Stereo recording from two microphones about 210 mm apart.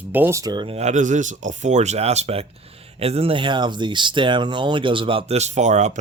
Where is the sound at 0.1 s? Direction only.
10° right (ahead or behind).